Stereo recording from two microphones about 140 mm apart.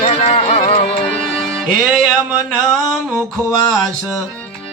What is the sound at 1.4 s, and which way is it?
Music, centre (ahead or behind).